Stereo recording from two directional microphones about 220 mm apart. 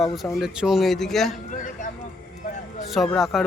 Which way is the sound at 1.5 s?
35° left (ahead or behind).